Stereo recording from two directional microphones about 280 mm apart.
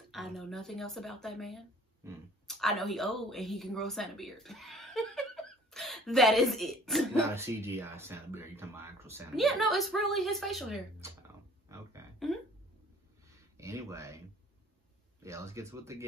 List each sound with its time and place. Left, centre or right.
0.1 s speech: centre
13.3 s a sound: centre
15.2 s speech: centre